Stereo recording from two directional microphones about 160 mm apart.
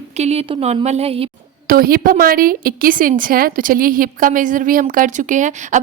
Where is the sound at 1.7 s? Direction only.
70° right (ahead or behind).